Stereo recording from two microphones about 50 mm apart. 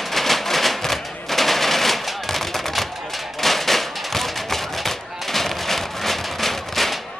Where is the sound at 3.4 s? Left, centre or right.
Centre.